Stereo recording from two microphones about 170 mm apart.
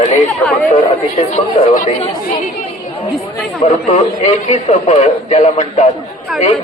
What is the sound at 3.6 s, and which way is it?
Speech, 45° left (ahead or behind).